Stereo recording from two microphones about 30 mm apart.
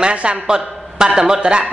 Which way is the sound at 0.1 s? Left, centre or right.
Right.